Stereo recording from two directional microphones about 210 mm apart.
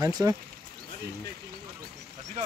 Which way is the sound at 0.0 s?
15° right (ahead or behind).